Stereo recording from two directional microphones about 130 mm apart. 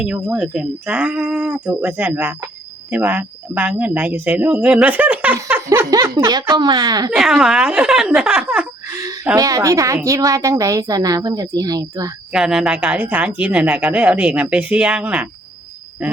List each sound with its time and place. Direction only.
0.0 s speech: 10° right (ahead or behind)
5.6 s a woman's voice: 20° right (ahead or behind)
7.2 s speech: 5° right (ahead or behind)
9.0 s a sound: 30° right (ahead or behind)
9.3 s a woman's voice: 30° right (ahead or behind)
12.3 s speech: 5° right (ahead or behind)